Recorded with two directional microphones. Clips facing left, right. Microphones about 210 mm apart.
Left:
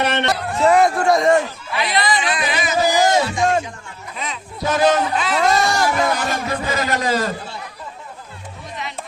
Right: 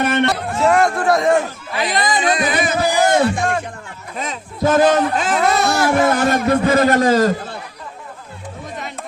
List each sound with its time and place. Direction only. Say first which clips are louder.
0.0 s music: right 3 dB; 50° right (ahead or behind)
0.6 s a man's voice: left 1 dB; centre (ahead or behind)
1.7 s speech: right 1 dB; 45° right (ahead or behind)
4.1 s a sound: right 3 dB; 45° right (ahead or behind)
5.4 s a man's voice: even; 5° right (ahead or behind)
6.1 s a man's voice: right 8 dB; 55° right (ahead or behind)